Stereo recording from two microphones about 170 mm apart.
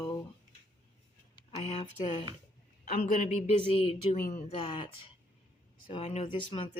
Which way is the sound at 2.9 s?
50° left (ahead or behind).